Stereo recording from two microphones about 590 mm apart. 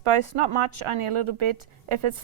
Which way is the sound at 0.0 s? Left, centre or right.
Right.